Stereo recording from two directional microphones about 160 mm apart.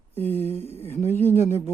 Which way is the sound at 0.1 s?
10° left (ahead or behind).